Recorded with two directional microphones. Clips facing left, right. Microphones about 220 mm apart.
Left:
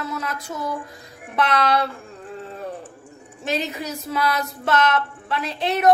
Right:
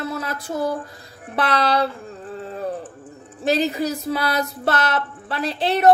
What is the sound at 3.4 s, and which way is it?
A woman's voice, 35° right (ahead or behind).